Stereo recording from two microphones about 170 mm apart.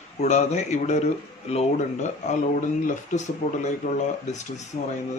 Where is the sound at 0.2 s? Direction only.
45° left (ahead or behind).